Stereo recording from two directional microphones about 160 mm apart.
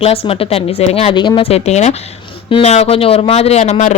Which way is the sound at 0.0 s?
40° left (ahead or behind).